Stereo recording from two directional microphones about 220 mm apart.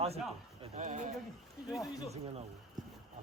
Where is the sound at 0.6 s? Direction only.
35° right (ahead or behind).